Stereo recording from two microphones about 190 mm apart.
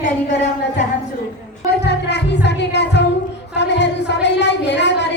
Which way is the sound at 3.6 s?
65° left (ahead or behind).